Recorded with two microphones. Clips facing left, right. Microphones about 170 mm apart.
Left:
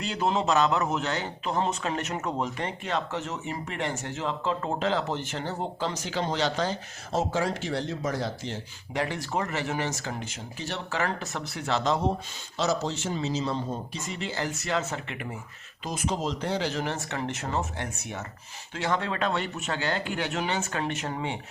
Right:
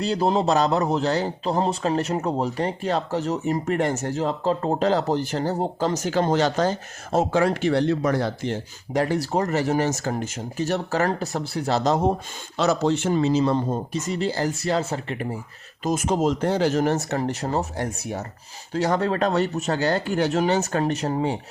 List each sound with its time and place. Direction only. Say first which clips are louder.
0.0 s a man's voice: right 6 dB; 35° right (ahead or behind)
12.5 s a man's voice: right 7 dB; 60° right (ahead or behind); by 21.3 s 40° right (ahead or behind)